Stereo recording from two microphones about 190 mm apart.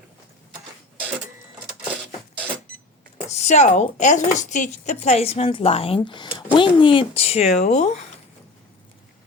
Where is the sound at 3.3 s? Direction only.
35° left (ahead or behind).